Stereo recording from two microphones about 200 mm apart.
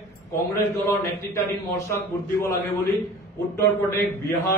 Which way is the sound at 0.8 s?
15° left (ahead or behind).